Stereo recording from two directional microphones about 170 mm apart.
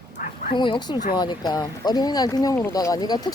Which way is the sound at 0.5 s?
25° left (ahead or behind).